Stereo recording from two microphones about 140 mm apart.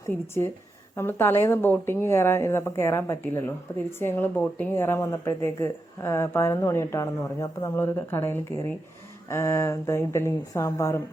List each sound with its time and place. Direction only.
0.9 s a woman's voice: 15° left (ahead or behind)